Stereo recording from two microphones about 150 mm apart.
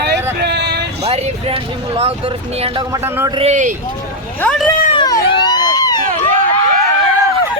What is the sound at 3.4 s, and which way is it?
Speech, 50° right (ahead or behind).